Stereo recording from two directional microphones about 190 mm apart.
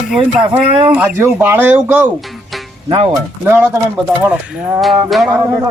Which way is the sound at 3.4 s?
10° right (ahead or behind).